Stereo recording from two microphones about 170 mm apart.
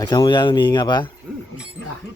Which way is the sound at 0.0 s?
25° left (ahead or behind).